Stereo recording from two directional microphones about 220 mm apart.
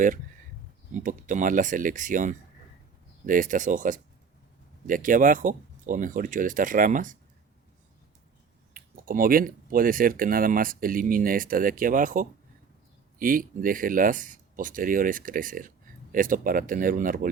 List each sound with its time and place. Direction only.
1.0 s speech: 35° right (ahead or behind)
8.7 s speech: 40° right (ahead or behind)